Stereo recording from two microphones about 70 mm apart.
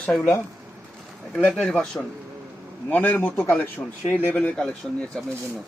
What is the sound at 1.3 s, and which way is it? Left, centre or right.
Speech, centre.